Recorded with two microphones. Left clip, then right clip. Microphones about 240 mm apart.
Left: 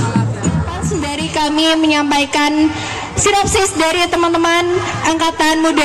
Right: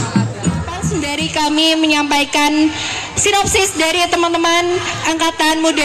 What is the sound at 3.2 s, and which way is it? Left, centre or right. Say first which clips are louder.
Speech: left 1 dB; right.